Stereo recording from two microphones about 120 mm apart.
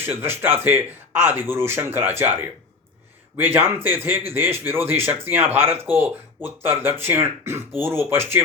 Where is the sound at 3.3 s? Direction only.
15° right (ahead or behind).